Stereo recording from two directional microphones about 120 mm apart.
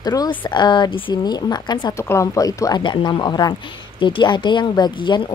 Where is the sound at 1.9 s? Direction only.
25° left (ahead or behind).